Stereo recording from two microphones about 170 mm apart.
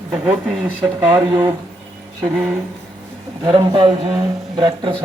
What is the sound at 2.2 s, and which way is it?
Speech, 5° right (ahead or behind).